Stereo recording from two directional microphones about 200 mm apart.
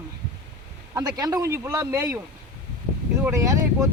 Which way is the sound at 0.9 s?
20° right (ahead or behind).